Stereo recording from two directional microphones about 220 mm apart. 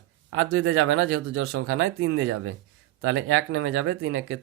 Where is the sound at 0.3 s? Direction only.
70° right (ahead or behind).